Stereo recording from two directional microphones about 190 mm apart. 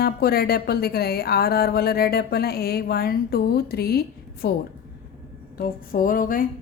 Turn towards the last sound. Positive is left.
turn(degrees=45)  # may be behind; listen again after turning